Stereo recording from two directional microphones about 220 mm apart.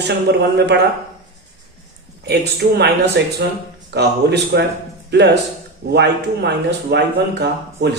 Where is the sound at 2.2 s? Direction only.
50° right (ahead or behind).